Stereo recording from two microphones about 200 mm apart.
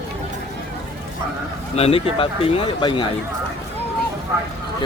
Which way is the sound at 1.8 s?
30° left (ahead or behind).